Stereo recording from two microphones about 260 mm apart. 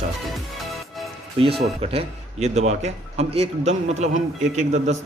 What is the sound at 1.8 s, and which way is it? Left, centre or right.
A man's voice, right.